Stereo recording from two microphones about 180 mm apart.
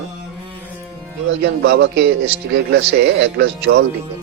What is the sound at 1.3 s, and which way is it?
A man's voice, 75° right (ahead or behind).